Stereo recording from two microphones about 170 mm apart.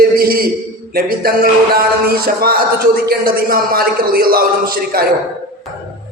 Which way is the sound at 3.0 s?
60° right (ahead or behind).